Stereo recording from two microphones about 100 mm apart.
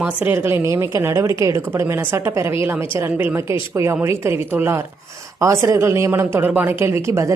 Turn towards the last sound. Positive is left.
turn(degrees=-30)  # may be behind; listen again after turning